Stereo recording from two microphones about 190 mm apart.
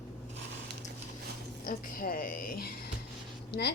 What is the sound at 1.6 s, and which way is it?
A woman's voice, 50° left (ahead or behind).